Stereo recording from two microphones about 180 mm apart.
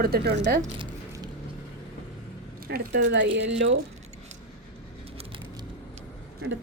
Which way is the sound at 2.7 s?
70° right (ahead or behind).